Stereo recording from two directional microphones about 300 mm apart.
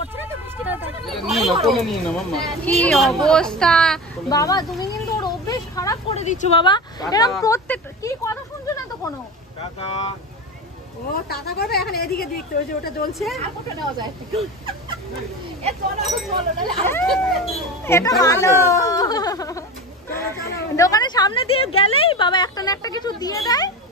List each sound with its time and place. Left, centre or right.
0.7 s a woman's voice: centre
11.2 s speech: left
13.9 s speech: centre
16.3 s speech: centre
16.9 s a woman's voice: centre